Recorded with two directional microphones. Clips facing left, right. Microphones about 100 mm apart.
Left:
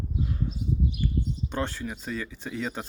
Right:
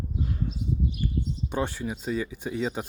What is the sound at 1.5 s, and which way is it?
Speech, 10° right (ahead or behind).